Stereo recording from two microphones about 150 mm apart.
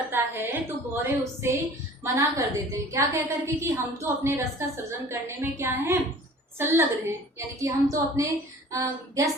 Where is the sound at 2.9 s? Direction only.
20° right (ahead or behind).